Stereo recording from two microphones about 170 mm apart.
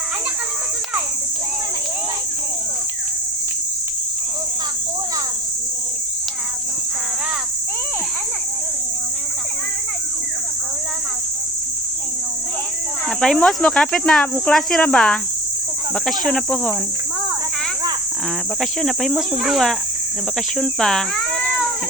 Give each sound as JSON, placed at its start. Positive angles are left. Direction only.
{"t": 13.2, "sound": "speech", "side_deg": 5}
{"t": 18.6, "sound": "speech", "side_deg": 0}